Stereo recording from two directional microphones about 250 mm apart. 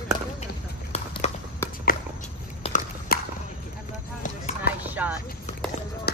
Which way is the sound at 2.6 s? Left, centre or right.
Left.